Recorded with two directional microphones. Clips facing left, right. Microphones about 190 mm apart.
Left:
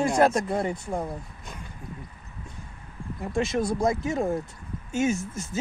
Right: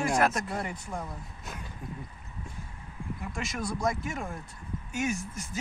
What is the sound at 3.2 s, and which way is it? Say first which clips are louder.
Speech: left 11 dB; 25° left (ahead or behind).